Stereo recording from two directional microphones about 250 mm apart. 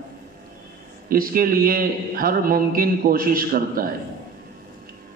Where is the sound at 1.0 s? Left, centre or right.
Right.